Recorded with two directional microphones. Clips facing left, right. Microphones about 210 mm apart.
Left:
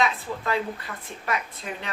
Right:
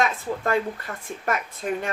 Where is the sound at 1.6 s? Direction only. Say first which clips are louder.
Right 8 dB; 45° right (ahead or behind).